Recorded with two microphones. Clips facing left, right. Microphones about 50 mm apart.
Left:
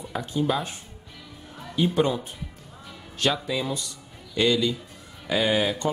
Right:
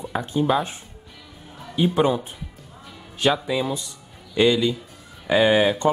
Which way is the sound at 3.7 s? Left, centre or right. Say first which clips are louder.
Right 1 dB; right.